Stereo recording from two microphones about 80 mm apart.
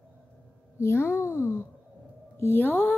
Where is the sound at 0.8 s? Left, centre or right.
Left.